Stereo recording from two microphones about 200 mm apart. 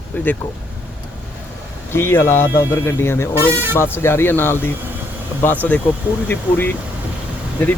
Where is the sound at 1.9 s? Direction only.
10° left (ahead or behind).